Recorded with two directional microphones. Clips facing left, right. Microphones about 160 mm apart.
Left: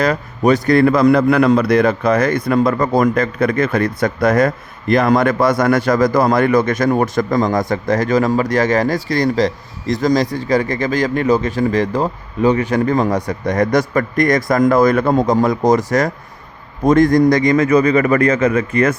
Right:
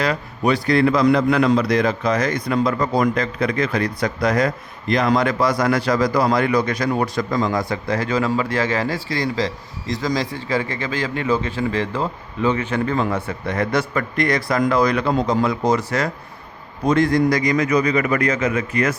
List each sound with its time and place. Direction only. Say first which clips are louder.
0.0 s a man's voice: left 5 dB; 45° left (ahead or behind)